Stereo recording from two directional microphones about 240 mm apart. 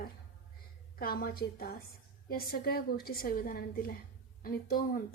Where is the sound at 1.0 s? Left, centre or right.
Left.